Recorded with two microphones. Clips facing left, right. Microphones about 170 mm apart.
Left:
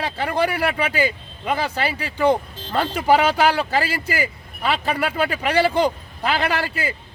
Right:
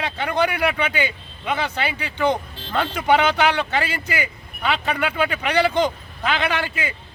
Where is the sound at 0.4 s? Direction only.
35° left (ahead or behind).